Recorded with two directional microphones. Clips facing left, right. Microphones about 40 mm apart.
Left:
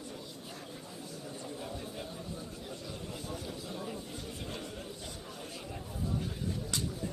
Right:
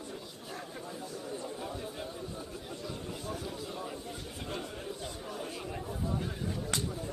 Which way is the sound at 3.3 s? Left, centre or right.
Centre.